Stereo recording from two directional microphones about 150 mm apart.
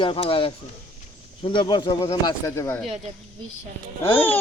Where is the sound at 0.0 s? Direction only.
35° left (ahead or behind); by 2.8 s 15° left (ahead or behind).